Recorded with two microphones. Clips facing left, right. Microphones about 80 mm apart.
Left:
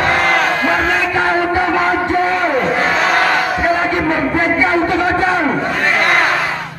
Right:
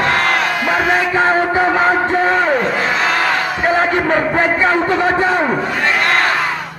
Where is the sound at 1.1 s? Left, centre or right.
Right.